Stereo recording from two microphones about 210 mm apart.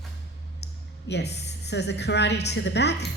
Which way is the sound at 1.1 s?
55° left (ahead or behind).